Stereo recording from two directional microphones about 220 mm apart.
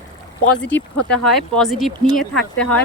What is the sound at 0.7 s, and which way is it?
Speech, 5° left (ahead or behind).